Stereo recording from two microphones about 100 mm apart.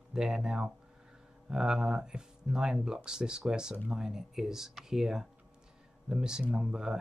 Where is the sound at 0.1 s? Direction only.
5° right (ahead or behind).